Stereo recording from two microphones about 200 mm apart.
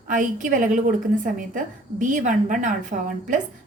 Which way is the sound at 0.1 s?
40° right (ahead or behind).